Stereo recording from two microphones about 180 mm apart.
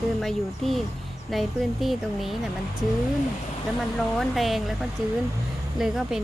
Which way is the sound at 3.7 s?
Centre (ahead or behind).